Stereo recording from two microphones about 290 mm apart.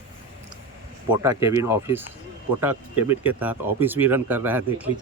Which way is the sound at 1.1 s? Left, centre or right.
Centre.